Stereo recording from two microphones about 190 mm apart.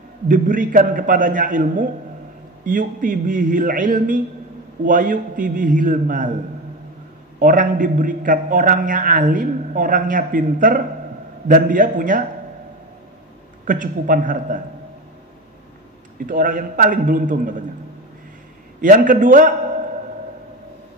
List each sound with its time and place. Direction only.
0.3 s a man's voice: 45° right (ahead or behind)
7.3 s a man's voice: 45° right (ahead or behind)
13.7 s a man's voice: 45° right (ahead or behind)
16.3 s a man's voice: 45° right (ahead or behind)
18.8 s a man's voice: 45° right (ahead or behind)